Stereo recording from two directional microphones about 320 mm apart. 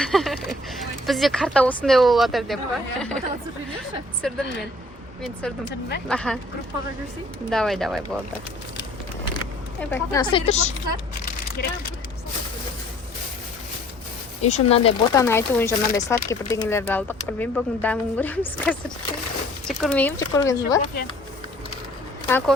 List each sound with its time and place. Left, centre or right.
0.0 s a sound: centre
0.8 s speech: centre
7.5 s speech: centre
9.9 s speech: centre
11.6 s speech: left
14.4 s speech: centre
22.3 s speech: centre